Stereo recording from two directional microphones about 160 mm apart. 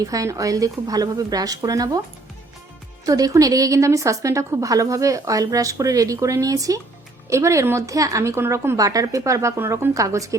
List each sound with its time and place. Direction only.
0.0 s a woman's voice: 20° right (ahead or behind)
3.1 s a woman's voice: 20° right (ahead or behind)